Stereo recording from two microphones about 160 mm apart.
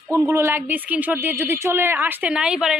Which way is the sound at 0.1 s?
15° right (ahead or behind).